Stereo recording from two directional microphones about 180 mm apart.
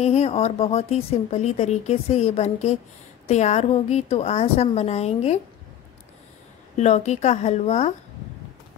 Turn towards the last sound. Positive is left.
turn(degrees=35)  # may be behind; listen again after turning